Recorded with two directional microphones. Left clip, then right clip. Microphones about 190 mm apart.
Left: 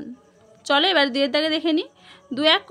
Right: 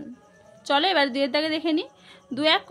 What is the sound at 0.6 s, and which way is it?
A woman's voice, 20° left (ahead or behind).